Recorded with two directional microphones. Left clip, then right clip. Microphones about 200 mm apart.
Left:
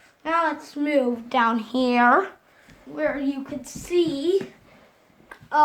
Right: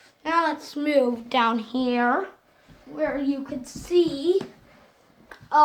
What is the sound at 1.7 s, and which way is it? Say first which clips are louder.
Speech: left 9 dB; 40° left (ahead or behind).